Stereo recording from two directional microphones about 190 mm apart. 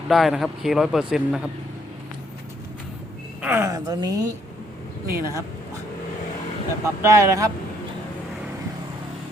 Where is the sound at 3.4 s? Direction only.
10° right (ahead or behind).